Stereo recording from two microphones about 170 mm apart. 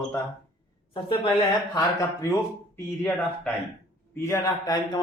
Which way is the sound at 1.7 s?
15° left (ahead or behind).